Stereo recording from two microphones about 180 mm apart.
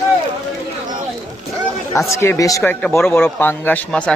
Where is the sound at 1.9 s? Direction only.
15° left (ahead or behind).